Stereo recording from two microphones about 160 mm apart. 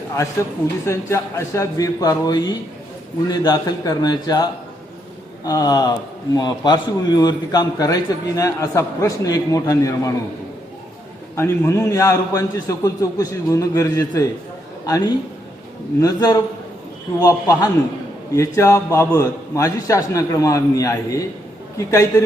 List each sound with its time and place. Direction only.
0.9 s a man's voice: 15° left (ahead or behind)
5.5 s a man's voice: 25° left (ahead or behind)
11.3 s a man's voice: 15° left (ahead or behind)